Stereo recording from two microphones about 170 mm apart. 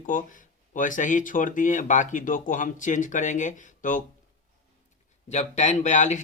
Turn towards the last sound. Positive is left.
turn(degrees=45)  # may be behind; listen again after turning